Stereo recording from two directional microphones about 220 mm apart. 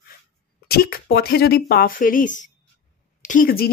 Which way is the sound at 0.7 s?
45° left (ahead or behind).